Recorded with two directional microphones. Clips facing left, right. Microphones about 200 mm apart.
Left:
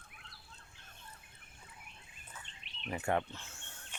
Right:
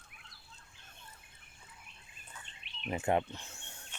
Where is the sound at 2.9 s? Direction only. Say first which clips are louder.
Right 3 dB; 20° right (ahead or behind).